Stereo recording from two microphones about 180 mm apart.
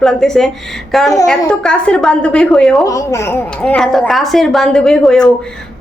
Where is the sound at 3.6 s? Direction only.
5° left (ahead or behind).